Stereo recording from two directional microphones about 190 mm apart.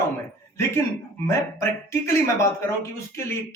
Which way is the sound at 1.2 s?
15° left (ahead or behind).